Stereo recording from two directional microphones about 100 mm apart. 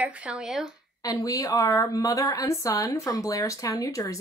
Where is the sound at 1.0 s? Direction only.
35° left (ahead or behind).